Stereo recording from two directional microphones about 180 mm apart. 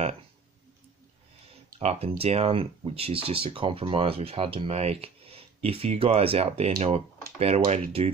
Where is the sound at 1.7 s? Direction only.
40° right (ahead or behind).